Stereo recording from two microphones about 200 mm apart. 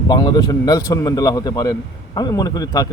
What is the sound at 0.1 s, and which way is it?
A man's voice, 20° left (ahead or behind).